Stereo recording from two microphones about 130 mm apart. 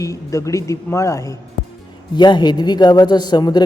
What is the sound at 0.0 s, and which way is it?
A woman's voice, 25° left (ahead or behind).